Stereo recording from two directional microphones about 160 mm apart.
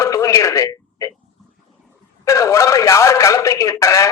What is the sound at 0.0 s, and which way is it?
Telephone, 20° left (ahead or behind).